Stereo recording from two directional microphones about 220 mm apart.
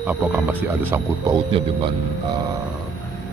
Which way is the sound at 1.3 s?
20° right (ahead or behind).